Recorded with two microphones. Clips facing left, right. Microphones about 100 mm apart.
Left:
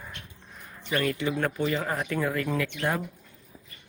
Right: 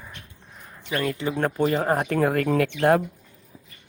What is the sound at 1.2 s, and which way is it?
Speech, 30° right (ahead or behind).